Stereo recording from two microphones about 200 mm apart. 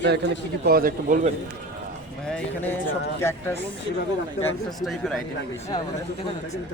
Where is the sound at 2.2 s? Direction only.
5° left (ahead or behind).